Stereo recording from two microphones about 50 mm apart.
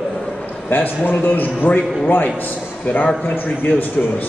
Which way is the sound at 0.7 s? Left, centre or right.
Left.